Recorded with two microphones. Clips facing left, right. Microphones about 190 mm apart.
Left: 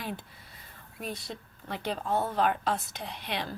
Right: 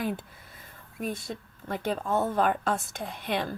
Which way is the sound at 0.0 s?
50° right (ahead or behind).